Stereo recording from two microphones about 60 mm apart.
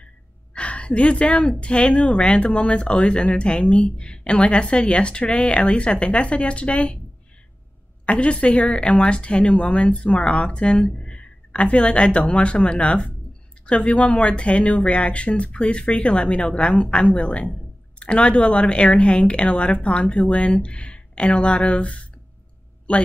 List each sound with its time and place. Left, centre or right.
0.6 s a woman's voice: centre
8.0 s speech: left